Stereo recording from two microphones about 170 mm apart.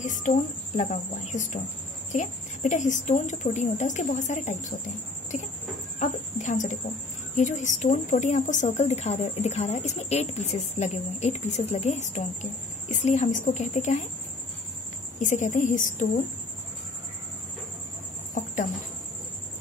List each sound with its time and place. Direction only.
0.0 s cricket: 50° left (ahead or behind)
0.7 s a woman's voice: 45° left (ahead or behind)
15.1 s a woman's voice: 45° left (ahead or behind)